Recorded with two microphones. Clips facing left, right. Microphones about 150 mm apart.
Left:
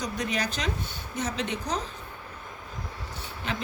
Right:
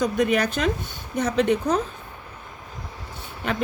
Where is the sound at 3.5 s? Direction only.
55° right (ahead or behind).